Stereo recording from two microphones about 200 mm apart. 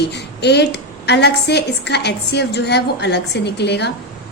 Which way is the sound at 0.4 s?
55° left (ahead or behind).